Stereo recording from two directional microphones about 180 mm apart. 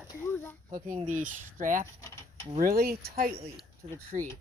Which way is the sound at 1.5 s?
45° right (ahead or behind).